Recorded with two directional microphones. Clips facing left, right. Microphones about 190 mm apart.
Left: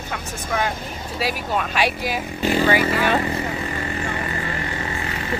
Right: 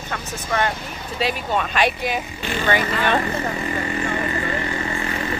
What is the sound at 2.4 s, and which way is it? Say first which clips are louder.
Speech: left 7 dB; 40° left (ahead or behind).